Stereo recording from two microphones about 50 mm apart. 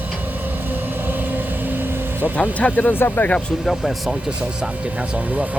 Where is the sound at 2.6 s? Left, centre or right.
Left.